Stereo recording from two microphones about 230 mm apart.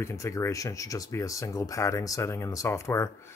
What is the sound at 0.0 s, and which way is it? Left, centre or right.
Speech, centre.